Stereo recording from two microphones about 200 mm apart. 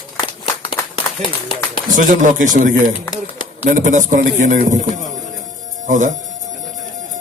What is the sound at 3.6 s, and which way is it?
A man's voice, 40° right (ahead or behind).